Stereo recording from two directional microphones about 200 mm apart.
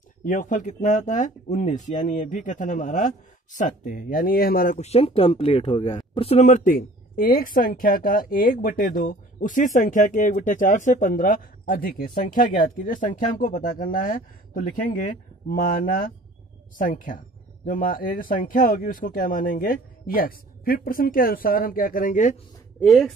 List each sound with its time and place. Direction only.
0.2 s speech: 40° left (ahead or behind)
22.8 s speech: centre (ahead or behind)